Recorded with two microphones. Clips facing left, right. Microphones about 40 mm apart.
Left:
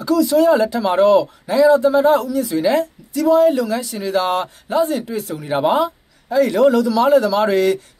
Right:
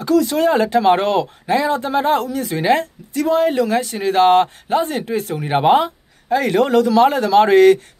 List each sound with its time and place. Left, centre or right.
0.0 s speech: right